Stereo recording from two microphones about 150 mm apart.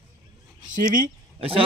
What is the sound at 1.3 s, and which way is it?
Speech, 40° right (ahead or behind).